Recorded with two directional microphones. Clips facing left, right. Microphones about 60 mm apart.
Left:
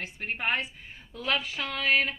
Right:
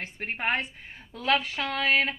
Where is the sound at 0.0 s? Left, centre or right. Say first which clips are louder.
Right 1 dB; right.